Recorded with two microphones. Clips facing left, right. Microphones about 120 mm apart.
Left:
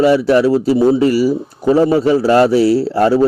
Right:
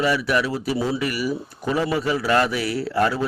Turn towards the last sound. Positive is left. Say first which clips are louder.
# left 9 dB
turn(degrees=30)  # may be behind; listen again after turning